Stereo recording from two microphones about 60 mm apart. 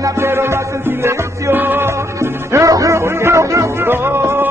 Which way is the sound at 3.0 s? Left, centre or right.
Right.